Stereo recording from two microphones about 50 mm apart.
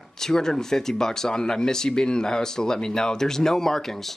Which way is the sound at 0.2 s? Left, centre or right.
Centre.